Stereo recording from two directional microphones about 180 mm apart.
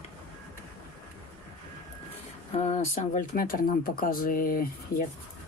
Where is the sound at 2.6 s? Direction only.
40° left (ahead or behind).